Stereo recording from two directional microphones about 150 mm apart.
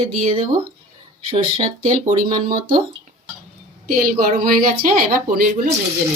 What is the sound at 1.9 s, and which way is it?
Speech, 65° right (ahead or behind).